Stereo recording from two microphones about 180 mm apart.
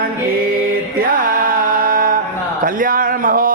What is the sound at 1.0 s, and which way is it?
Music, 50° right (ahead or behind).